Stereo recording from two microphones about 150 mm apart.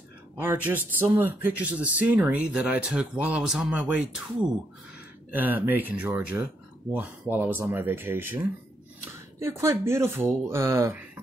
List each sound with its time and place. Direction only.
0.7 s speech: 10° right (ahead or behind)
9.4 s speech: 20° right (ahead or behind)